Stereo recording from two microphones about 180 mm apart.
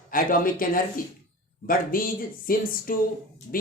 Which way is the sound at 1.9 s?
50° left (ahead or behind).